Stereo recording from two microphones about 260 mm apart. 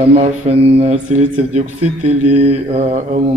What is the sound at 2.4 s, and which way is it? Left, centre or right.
Speech, right.